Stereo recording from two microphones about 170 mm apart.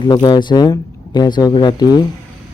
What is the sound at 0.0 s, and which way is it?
Speech, 25° left (ahead or behind).